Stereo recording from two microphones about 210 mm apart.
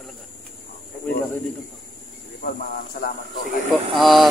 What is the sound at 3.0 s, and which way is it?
Speech, 40° left (ahead or behind).